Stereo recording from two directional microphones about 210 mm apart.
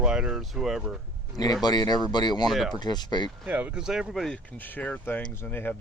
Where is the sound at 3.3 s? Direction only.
5° right (ahead or behind).